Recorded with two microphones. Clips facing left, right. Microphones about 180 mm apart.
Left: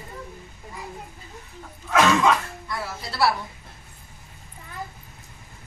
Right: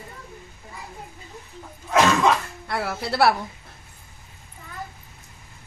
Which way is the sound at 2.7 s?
65° right (ahead or behind).